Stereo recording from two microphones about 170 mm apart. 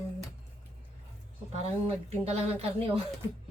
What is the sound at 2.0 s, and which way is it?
Speech, 35° right (ahead or behind).